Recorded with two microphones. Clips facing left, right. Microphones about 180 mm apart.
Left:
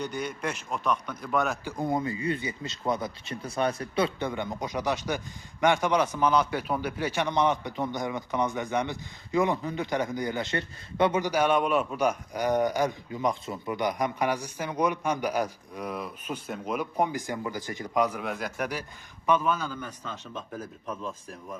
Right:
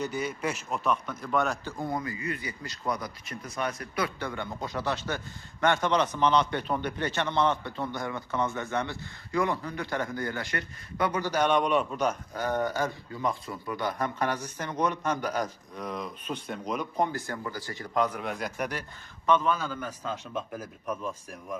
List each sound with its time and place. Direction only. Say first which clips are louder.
0.0 s a man's voice: right 1 dB; 5° right (ahead or behind)
1.6 s speech: left 4 dB; 20° left (ahead or behind)
11.3 s speech: left 1 dB; 10° left (ahead or behind)
20.3 s speech: right 2 dB; 10° right (ahead or behind)